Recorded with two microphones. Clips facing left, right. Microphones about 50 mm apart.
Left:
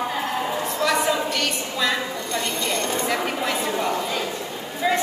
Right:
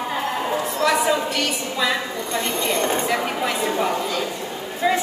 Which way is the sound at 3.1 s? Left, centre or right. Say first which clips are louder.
Right 1 dB; centre.